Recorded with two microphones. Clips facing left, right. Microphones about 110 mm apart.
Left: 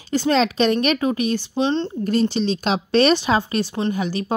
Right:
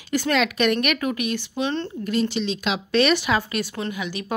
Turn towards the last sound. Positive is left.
turn(degrees=35)  # may be behind; listen again after turning